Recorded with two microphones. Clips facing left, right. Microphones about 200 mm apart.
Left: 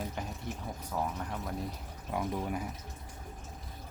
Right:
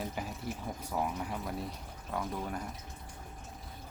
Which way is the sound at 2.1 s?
10° left (ahead or behind).